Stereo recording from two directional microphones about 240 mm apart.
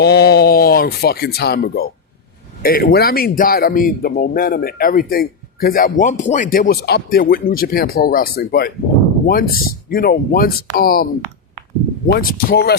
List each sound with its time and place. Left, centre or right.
0.0 s a man's voice: left